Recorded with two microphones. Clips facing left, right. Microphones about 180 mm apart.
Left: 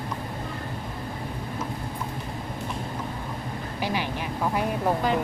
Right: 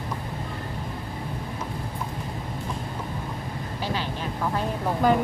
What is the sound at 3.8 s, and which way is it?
Vehicle, 15° left (ahead or behind).